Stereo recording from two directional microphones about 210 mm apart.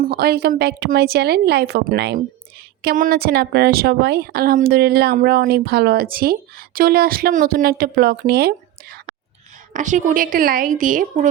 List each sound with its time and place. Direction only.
0.0 s speech: 45° right (ahead or behind)
9.7 s a woman's voice: 35° right (ahead or behind)